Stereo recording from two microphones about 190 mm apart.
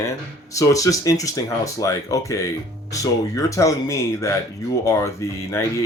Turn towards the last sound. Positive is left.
turn(degrees=15)  # may be behind; listen again after turning